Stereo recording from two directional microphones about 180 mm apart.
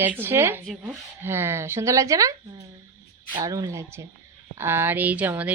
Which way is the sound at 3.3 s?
20° right (ahead or behind).